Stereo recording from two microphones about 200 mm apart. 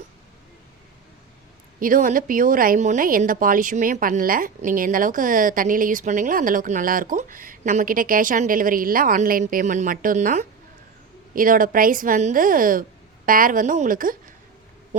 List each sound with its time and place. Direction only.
1.8 s speech: 40° right (ahead or behind)